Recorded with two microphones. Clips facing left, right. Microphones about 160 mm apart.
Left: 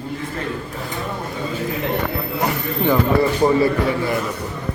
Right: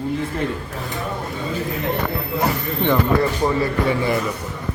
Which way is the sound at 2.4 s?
5° left (ahead or behind).